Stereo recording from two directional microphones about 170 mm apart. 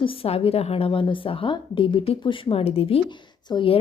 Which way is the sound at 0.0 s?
30° left (ahead or behind).